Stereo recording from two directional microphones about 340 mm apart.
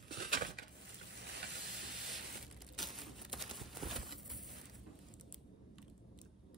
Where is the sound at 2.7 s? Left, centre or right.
Centre.